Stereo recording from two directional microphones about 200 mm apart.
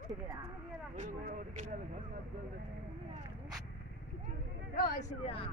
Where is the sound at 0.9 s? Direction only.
40° right (ahead or behind).